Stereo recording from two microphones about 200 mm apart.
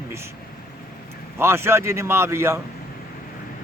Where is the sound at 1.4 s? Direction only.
10° right (ahead or behind).